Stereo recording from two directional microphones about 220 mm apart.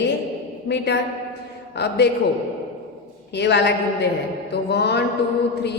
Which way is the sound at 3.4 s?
50° left (ahead or behind).